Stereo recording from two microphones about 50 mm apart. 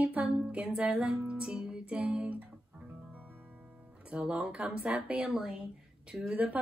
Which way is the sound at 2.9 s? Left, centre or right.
Right.